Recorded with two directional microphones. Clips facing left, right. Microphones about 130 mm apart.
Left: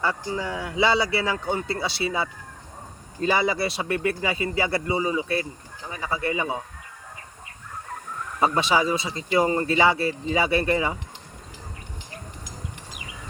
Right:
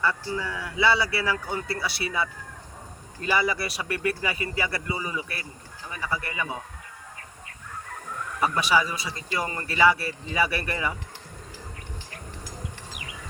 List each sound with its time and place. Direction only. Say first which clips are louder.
0.0 s a man's voice: left 1 dB; 20° left (ahead or behind)
8.4 s a man's voice: left 2 dB; 25° left (ahead or behind)